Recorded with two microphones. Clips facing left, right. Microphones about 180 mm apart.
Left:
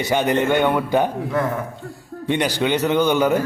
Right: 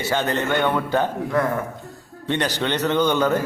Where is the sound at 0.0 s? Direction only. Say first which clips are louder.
Left 4 dB; 15° left (ahead or behind).